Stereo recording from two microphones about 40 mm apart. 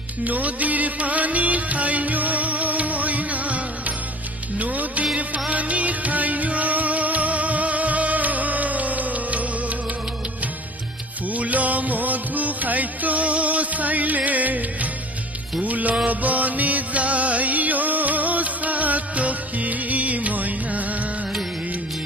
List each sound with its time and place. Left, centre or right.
0.2 s music: right
11.3 s music: right